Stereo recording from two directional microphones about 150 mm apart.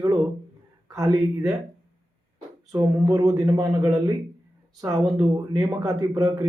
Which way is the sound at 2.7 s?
20° right (ahead or behind).